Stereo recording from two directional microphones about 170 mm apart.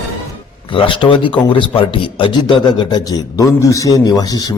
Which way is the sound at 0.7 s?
30° left (ahead or behind).